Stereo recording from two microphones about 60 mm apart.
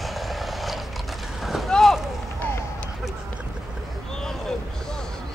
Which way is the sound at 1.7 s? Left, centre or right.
Centre.